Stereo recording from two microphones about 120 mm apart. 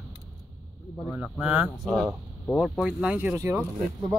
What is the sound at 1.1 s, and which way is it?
Speech, 10° right (ahead or behind).